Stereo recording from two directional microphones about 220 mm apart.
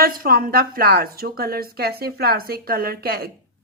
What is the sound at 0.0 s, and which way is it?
A woman's voice, 40° right (ahead or behind).